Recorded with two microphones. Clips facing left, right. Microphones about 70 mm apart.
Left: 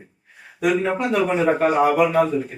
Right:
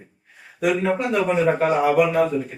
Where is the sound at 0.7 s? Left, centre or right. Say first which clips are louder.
Left 1 dB; centre.